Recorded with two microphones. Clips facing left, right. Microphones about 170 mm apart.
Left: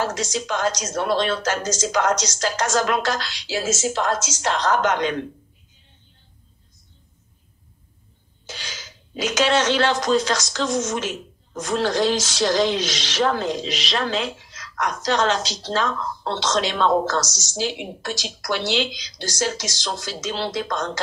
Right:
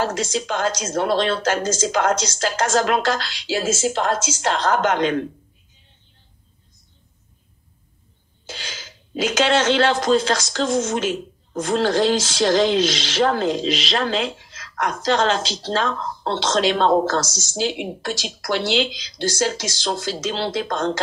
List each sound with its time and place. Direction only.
0.0 s speech: 30° right (ahead or behind)
8.5 s speech: 30° right (ahead or behind)